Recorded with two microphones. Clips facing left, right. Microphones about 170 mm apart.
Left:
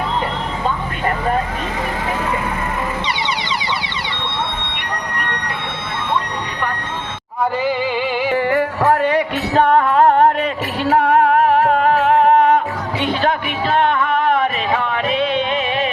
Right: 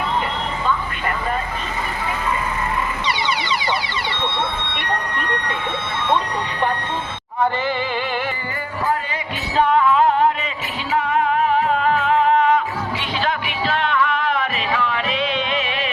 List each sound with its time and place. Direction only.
8.3 s music: 75° left (ahead or behind); by 15.4 s 50° left (ahead or behind)